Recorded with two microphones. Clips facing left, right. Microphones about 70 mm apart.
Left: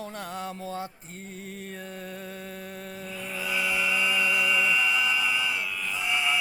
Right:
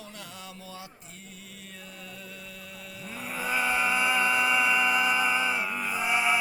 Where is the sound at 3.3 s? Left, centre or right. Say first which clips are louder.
Right 2 dB; right.